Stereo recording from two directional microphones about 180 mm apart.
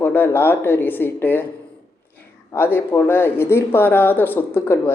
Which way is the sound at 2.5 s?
10° left (ahead or behind).